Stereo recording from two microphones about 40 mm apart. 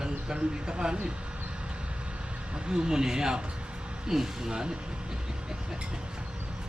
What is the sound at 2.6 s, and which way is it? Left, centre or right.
A man's voice, centre.